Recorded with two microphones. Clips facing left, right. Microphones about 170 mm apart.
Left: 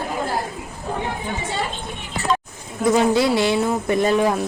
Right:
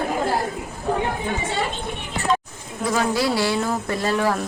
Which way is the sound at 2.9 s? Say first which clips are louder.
Left 3 dB; 25° left (ahead or behind).